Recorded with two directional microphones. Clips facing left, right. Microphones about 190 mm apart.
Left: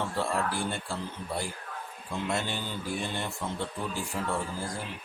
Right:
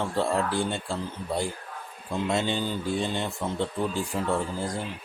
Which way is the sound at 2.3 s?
20° right (ahead or behind).